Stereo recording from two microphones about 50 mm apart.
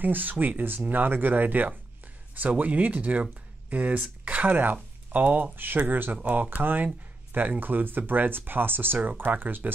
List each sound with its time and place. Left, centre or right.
0.0 s speech: right